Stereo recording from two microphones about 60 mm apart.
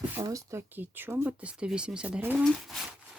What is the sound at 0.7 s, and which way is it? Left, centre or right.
Speech, right.